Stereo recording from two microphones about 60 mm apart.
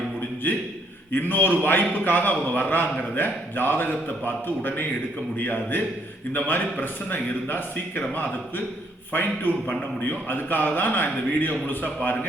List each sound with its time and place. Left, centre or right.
1.1 s a man's voice: left